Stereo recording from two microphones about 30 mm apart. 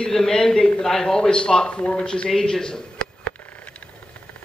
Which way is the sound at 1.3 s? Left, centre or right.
Left.